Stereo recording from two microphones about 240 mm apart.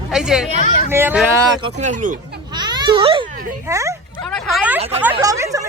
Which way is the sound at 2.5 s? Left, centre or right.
Centre.